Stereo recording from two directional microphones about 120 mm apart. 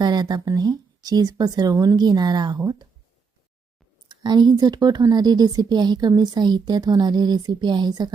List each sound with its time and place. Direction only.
0.0 s speech: 35° right (ahead or behind)
4.1 s speech: 35° right (ahead or behind)